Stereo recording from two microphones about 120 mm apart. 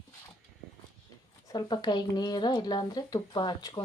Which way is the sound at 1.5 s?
35° left (ahead or behind).